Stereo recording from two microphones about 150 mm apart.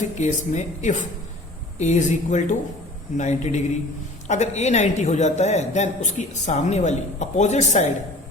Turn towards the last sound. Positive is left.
turn(degrees=50)  # may be behind; listen again after turning